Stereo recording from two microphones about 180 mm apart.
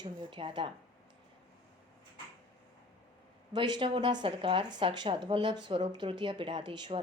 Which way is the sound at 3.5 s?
25° right (ahead or behind).